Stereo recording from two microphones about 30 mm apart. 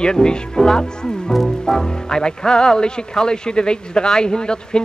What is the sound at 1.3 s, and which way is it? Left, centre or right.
Speech, centre.